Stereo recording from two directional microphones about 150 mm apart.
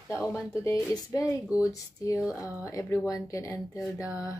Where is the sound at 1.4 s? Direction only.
5° right (ahead or behind).